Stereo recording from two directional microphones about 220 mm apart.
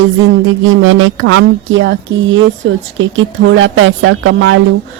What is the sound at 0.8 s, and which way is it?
Speech, 60° right (ahead or behind).